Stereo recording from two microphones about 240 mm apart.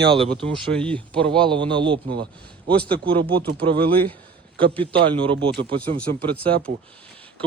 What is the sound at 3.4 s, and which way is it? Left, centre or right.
Speech, right.